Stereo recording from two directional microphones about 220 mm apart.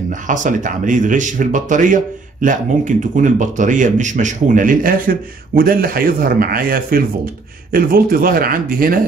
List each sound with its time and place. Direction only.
0.1 s speech: 35° right (ahead or behind)